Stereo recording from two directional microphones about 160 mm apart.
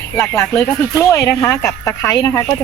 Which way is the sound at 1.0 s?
15° left (ahead or behind).